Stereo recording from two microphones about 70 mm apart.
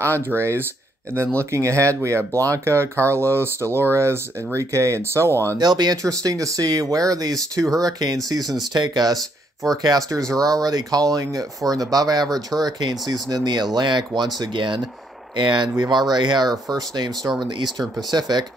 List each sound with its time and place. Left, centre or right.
0.0 s speech: right
5.6 s speech: right
6.0 s speech: right
9.6 s speech: right
17.4 s speech: right